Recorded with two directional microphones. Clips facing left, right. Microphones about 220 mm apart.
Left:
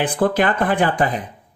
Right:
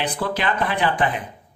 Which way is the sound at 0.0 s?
50° left (ahead or behind).